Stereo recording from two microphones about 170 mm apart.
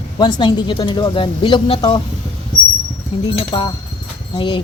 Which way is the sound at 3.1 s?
35° left (ahead or behind).